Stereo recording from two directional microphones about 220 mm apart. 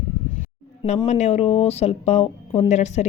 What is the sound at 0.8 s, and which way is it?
Speech, 30° left (ahead or behind).